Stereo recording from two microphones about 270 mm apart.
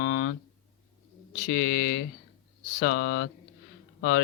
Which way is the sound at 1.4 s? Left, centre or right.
Left.